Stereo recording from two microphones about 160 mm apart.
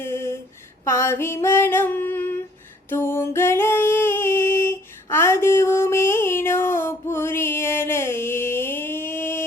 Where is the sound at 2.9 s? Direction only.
15° left (ahead or behind).